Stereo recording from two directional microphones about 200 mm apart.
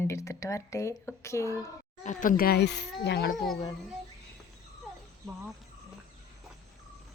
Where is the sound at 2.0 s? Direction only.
40° left (ahead or behind); by 3.4 s 55° left (ahead or behind).